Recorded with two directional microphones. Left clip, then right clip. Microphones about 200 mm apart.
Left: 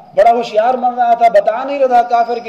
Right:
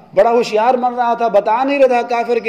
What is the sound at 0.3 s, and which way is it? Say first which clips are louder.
A man's voice: left 1 dB; 40° right (ahead or behind).